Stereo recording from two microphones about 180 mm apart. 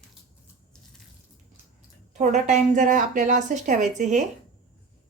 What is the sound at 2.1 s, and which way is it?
Speech, 40° right (ahead or behind).